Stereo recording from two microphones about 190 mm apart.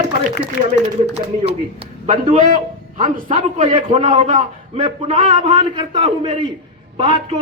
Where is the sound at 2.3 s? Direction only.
45° right (ahead or behind).